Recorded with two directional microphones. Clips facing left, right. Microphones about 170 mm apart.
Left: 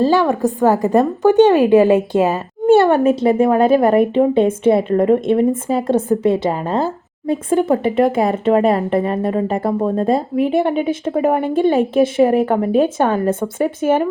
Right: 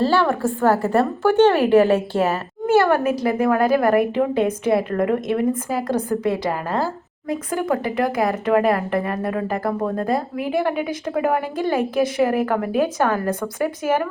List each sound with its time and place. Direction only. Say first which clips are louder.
0.0 s a woman's voice: left 4 dB; 15° left (ahead or behind)